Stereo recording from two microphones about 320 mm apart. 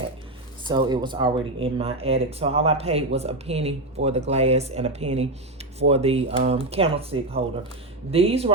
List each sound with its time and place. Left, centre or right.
0.6 s speech: centre